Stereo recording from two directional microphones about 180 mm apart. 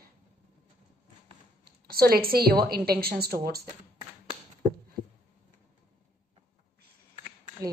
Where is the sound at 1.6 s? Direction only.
60° right (ahead or behind).